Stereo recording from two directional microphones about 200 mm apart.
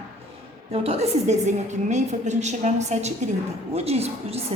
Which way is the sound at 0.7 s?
30° right (ahead or behind).